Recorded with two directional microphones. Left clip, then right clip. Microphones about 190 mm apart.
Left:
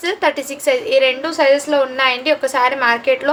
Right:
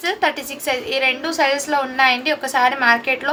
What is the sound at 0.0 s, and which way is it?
A woman's voice, 20° left (ahead or behind).